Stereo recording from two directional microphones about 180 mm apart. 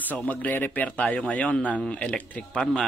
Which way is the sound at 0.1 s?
10° left (ahead or behind).